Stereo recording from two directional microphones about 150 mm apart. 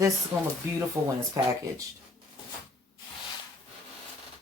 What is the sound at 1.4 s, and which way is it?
Speech, 20° right (ahead or behind).